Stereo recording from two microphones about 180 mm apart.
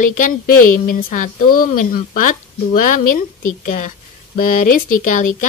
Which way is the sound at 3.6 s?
45° left (ahead or behind).